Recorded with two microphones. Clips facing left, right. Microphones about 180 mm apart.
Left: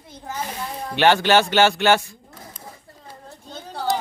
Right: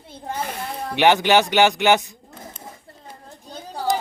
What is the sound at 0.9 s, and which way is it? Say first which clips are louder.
Speech: even; 15° right (ahead or behind).